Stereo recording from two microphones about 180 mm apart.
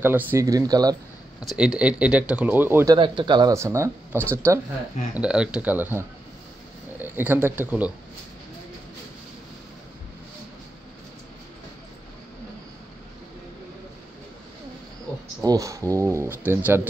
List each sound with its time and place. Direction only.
0.0 s speech: 10° right (ahead or behind)
1.4 s speech: centre (ahead or behind)
3.0 s speech: 25° right (ahead or behind); by 7.9 s 10° right (ahead or behind)
15.4 s speech: 20° right (ahead or behind)